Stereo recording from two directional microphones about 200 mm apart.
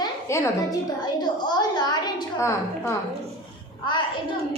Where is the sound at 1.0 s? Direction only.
20° left (ahead or behind).